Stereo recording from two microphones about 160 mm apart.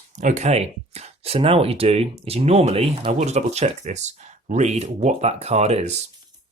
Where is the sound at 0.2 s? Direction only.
50° right (ahead or behind).